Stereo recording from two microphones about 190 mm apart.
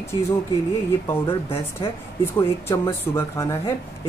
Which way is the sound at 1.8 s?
25° left (ahead or behind).